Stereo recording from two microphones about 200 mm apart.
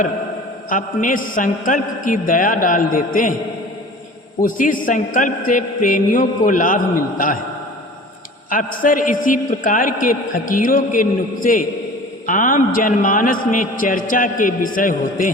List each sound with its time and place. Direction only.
0.7 s a man's voice: 40° left (ahead or behind)
4.4 s a man's voice: 40° left (ahead or behind)
8.4 s a man's voice: 45° left (ahead or behind)